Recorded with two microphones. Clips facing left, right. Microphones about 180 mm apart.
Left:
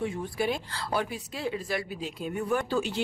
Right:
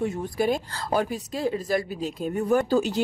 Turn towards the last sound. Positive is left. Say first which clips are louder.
# right 6 dB
turn(degrees=-40)  # may be behind; listen again after turning